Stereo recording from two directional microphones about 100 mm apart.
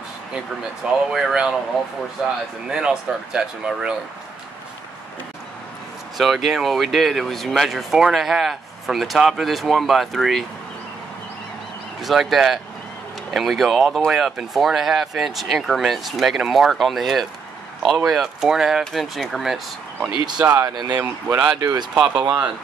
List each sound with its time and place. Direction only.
1.1 s speech: 5° right (ahead or behind)
6.1 s speech: centre (ahead or behind)
12.0 s speech: centre (ahead or behind)
20.4 s speech: 25° right (ahead or behind)
20.7 s speech: 40° right (ahead or behind)
21.0 s speech: 20° right (ahead or behind)
21.5 s speech: 40° right (ahead or behind)
21.9 s speech: 10° right (ahead or behind)